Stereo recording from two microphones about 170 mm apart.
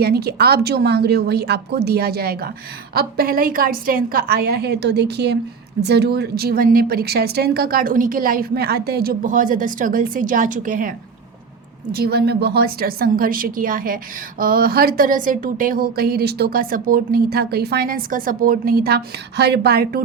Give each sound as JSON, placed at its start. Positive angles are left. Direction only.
{"t": 0.0, "sound": "a woman's voice", "side_deg": -70}
{"t": 11.9, "sound": "a woman's voice", "side_deg": -65}